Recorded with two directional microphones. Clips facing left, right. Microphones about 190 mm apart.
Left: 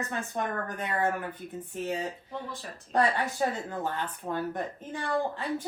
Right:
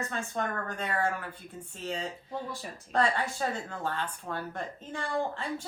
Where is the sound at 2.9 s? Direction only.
15° left (ahead or behind).